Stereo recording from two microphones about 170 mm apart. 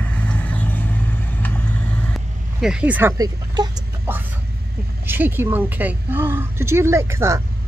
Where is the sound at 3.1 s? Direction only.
25° right (ahead or behind).